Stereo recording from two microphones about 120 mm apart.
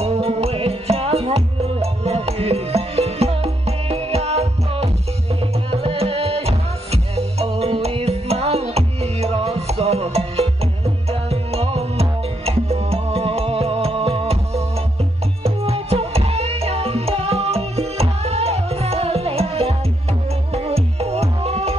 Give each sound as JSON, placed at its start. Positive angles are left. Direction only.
{"t": 0.0, "sound": "music", "side_deg": -60}